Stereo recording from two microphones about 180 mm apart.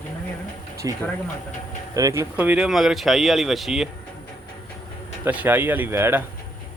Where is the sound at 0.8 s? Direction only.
20° right (ahead or behind); by 3.9 s centre (ahead or behind).